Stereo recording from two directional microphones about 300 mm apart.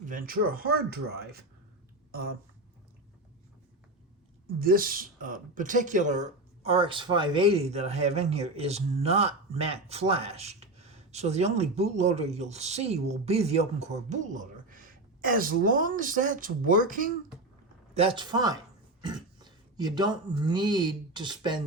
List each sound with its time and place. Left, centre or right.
0.0 s speech: right
4.6 s speech: right